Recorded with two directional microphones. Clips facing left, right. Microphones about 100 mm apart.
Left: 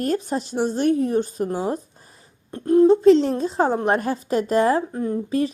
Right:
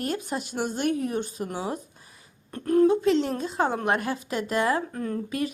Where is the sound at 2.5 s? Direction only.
20° left (ahead or behind).